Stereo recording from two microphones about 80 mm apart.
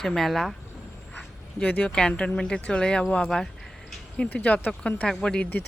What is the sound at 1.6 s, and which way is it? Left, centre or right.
Speech, centre.